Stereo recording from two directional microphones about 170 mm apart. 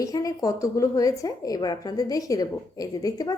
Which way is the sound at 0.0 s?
20° left (ahead or behind).